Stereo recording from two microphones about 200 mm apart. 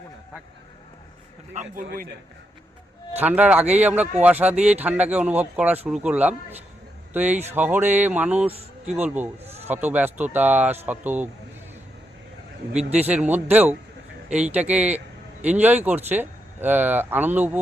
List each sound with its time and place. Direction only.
1.5 s a man's voice: 45° right (ahead or behind)
3.2 s speech: 5° right (ahead or behind)
13.0 s speech: 10° right (ahead or behind)